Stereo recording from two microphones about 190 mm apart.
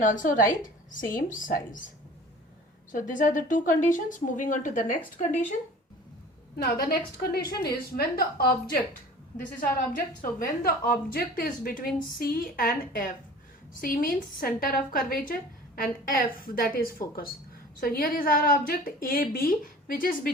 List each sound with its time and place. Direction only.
0.0 s a woman's voice: 45° left (ahead or behind)
2.9 s a woman's voice: 45° left (ahead or behind)
6.8 s a woman's voice: 50° left (ahead or behind)